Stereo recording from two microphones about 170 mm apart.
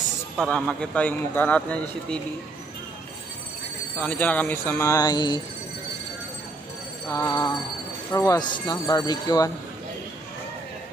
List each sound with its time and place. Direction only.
0.4 s a man's voice: centre (ahead or behind)
4.0 s a man's voice: 10° left (ahead or behind)
7.1 s speech: 20° left (ahead or behind)